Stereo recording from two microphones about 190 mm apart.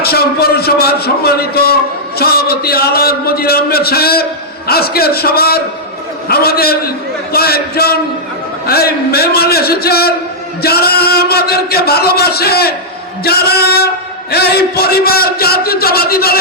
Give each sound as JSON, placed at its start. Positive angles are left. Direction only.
{"t": 0.0, "sound": "a man's voice", "side_deg": 55}